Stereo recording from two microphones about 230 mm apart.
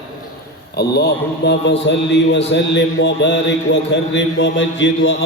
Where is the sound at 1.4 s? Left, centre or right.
Left.